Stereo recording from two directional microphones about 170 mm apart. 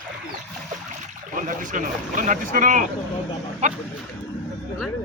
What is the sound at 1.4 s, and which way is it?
A man's voice, 50° right (ahead or behind).